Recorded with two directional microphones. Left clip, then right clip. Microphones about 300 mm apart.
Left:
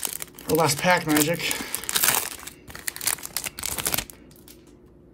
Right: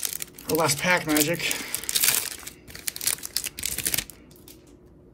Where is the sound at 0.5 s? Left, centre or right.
Centre.